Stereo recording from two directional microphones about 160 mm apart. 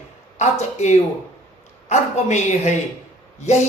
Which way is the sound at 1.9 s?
45° left (ahead or behind).